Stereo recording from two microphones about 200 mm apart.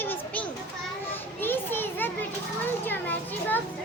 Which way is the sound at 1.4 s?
10° left (ahead or behind).